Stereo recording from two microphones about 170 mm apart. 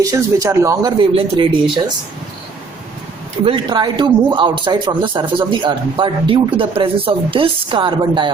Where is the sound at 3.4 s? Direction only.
30° right (ahead or behind).